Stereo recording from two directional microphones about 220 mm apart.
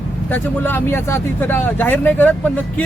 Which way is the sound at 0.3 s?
10° left (ahead or behind).